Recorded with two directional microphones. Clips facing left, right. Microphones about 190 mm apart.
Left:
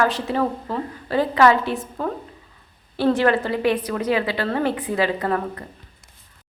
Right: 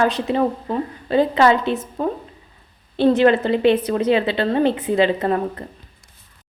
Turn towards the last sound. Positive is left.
turn(degrees=-25)  # may be behind; listen again after turning